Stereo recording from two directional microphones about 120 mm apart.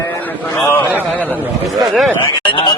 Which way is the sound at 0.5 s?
20° left (ahead or behind).